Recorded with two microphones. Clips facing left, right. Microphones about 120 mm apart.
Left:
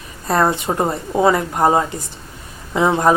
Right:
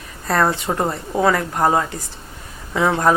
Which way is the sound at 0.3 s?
20° left (ahead or behind).